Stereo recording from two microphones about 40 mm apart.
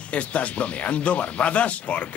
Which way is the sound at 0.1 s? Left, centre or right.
Left.